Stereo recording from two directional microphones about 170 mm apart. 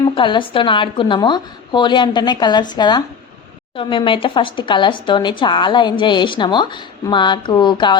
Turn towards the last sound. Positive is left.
turn(degrees=25)  # may be behind; listen again after turning